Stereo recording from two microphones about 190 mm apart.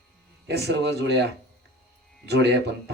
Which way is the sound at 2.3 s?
65° right (ahead or behind).